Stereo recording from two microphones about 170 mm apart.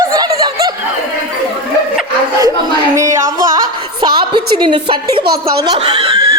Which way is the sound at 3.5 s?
25° right (ahead or behind).